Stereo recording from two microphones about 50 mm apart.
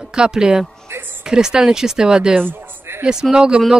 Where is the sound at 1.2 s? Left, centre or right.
Centre.